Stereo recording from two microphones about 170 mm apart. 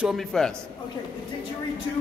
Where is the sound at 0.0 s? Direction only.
Centre (ahead or behind).